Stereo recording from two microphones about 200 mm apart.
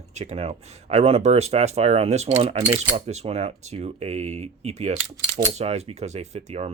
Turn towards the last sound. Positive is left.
turn(degrees=-35)  # may be behind; listen again after turning